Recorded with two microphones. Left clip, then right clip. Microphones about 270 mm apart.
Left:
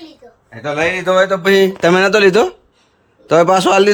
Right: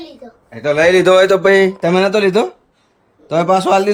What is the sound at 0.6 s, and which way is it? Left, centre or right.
Speech, centre.